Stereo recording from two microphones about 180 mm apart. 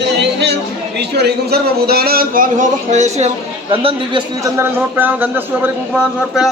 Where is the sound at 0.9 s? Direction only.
65° right (ahead or behind); by 5.7 s 10° right (ahead or behind).